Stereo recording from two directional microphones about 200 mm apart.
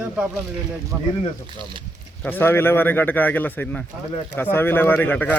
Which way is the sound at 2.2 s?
10° left (ahead or behind).